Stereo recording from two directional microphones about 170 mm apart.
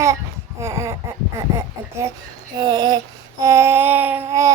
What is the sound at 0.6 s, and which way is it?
Speech, 15° right (ahead or behind).